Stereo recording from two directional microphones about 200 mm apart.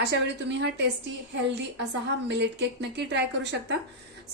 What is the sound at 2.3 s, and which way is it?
A woman's voice, 60° right (ahead or behind).